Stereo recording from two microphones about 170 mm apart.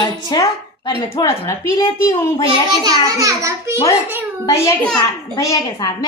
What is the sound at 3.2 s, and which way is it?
Speech, 20° right (ahead or behind).